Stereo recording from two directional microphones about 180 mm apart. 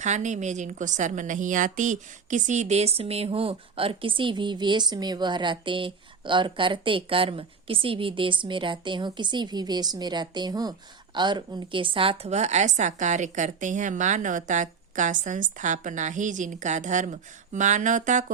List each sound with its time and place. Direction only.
0.0 s a woman's voice: 40° right (ahead or behind)